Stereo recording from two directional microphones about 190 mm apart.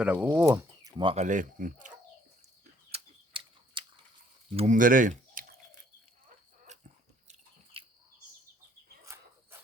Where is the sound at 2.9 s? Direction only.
25° right (ahead or behind).